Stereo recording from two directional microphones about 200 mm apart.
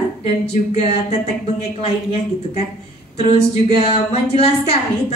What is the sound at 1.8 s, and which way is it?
Speech, 30° left (ahead or behind).